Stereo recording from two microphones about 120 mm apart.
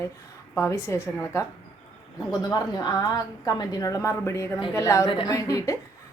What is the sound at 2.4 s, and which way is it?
A woman's voice, 35° left (ahead or behind).